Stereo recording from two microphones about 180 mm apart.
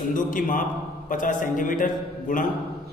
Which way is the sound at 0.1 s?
45° left (ahead or behind).